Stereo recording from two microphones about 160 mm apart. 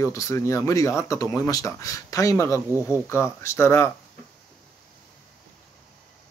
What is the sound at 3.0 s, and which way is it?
Speech, 15° left (ahead or behind).